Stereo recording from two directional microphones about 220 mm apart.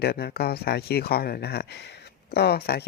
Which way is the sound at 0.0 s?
45° left (ahead or behind).